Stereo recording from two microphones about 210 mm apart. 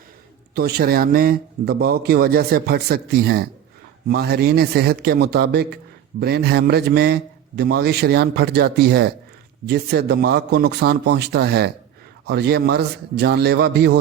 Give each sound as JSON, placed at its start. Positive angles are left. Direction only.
{"t": 0.5, "sound": "a man's voice", "side_deg": -50}